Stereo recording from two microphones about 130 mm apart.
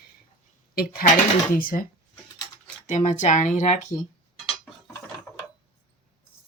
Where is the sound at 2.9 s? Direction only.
70° left (ahead or behind).